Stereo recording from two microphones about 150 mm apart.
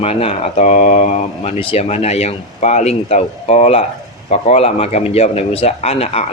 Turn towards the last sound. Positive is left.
turn(degrees=45)  # may be behind; listen again after turning